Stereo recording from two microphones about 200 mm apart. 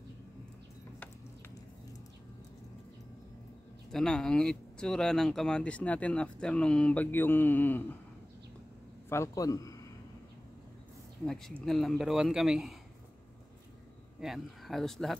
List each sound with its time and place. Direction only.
3.9 s speech: 5° left (ahead or behind)
9.1 s a man's voice: 15° left (ahead or behind)
11.2 s speech: centre (ahead or behind)
14.2 s speech: centre (ahead or behind)